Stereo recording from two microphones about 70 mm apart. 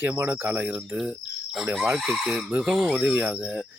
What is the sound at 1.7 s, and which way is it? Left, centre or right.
Speech, centre.